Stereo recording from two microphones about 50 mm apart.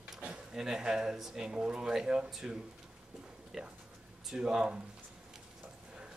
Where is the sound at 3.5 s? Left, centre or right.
Centre.